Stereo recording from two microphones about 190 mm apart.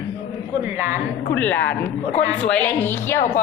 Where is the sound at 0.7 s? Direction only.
10° right (ahead or behind).